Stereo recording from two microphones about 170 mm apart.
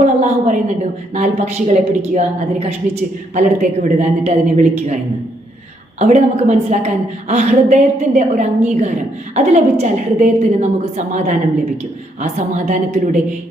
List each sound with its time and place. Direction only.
0.0 s a woman's voice: 45° right (ahead or behind)
6.0 s a woman's voice: 45° right (ahead or behind)